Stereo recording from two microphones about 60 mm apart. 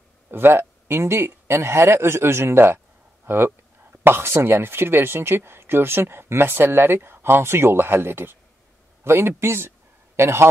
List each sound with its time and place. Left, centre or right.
0.3 s a man's voice: right